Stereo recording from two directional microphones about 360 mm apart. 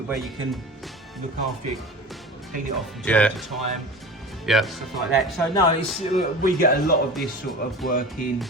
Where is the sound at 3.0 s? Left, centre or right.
Centre.